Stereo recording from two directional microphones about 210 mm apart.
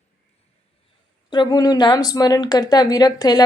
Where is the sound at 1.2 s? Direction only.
20° left (ahead or behind).